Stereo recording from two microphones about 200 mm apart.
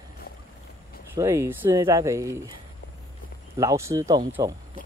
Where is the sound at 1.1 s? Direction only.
15° right (ahead or behind).